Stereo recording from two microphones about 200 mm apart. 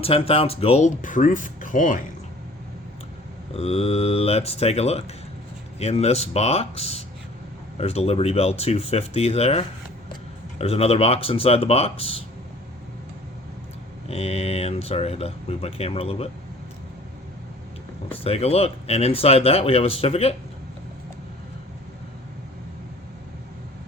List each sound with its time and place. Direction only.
0.0 s speech: 30° left (ahead or behind)
3.5 s speech: 30° left (ahead or behind)
14.1 s speech: 30° left (ahead or behind)
18.2 s speech: 30° left (ahead or behind)